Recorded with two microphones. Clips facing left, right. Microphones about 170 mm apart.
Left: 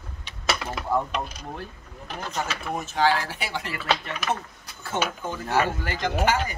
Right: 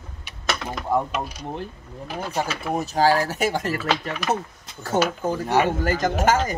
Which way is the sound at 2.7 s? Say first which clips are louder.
Right 4 dB; 40° right (ahead or behind).